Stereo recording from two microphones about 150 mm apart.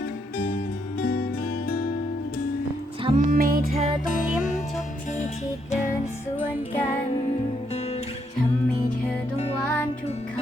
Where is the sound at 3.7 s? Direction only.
45° right (ahead or behind).